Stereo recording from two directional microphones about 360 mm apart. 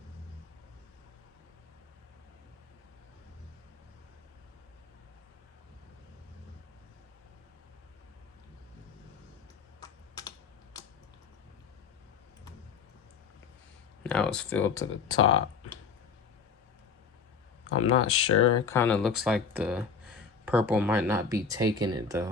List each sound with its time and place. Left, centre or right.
9.8 s typing: centre
14.0 s speech: centre
15.2 s speech: left
17.7 s speech: left
18.5 s speech: centre